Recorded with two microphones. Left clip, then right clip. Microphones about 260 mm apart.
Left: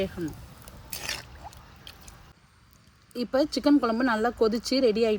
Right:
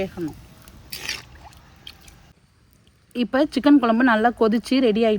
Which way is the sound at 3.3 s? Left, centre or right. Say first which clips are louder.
Right 5 dB; right.